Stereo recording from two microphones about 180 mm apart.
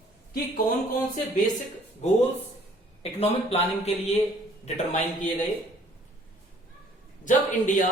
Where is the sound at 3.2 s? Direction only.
35° left (ahead or behind).